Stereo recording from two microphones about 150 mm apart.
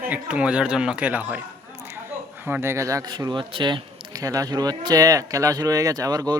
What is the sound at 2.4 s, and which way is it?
Speech, 15° right (ahead or behind).